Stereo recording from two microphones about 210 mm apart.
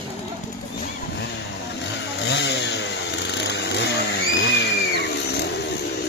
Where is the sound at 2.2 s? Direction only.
55° left (ahead or behind).